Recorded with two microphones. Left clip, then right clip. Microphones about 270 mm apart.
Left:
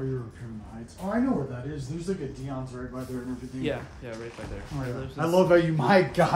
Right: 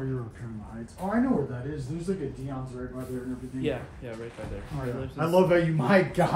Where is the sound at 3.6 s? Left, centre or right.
Centre.